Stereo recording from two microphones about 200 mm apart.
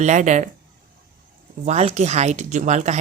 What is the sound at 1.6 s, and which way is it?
Speech, 35° right (ahead or behind).